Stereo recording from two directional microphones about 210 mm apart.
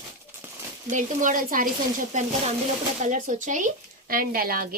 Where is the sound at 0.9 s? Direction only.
40° right (ahead or behind).